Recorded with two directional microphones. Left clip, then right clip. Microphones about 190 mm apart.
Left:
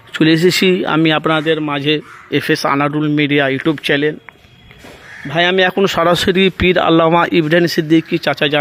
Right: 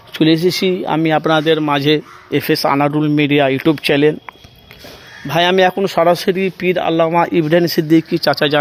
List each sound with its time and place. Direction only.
0.2 s speech: 15° left (ahead or behind); by 2.0 s 10° right (ahead or behind)
2.3 s speech: centre (ahead or behind)
5.3 s speech: 5° right (ahead or behind)
5.7 s speech: 10° left (ahead or behind)
7.2 s speech: 5° left (ahead or behind)